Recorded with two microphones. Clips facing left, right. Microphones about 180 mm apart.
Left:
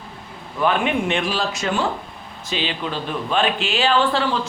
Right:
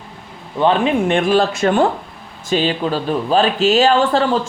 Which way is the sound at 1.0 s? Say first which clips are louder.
Right 8 dB; 50° right (ahead or behind).